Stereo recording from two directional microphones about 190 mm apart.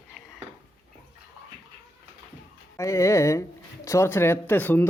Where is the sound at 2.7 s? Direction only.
15° left (ahead or behind).